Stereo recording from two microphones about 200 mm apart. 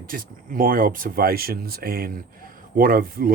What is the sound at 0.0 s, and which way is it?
Speech, 45° right (ahead or behind).